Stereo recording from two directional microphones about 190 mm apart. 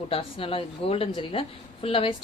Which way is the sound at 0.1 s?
30° left (ahead or behind).